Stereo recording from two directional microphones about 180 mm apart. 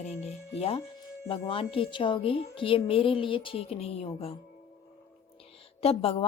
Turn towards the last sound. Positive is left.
turn(degrees=35)  # may be behind; listen again after turning